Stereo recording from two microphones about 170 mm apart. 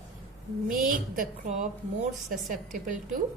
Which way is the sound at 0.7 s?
55° right (ahead or behind).